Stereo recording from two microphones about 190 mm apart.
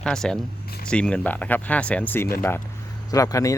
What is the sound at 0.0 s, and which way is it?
Speech, 5° left (ahead or behind).